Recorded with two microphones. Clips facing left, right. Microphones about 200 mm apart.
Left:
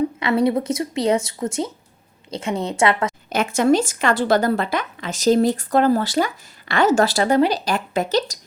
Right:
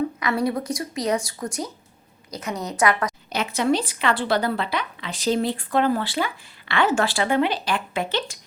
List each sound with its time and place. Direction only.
0.2 s speech: 25° left (ahead or behind)
3.2 s a woman's voice: 50° left (ahead or behind)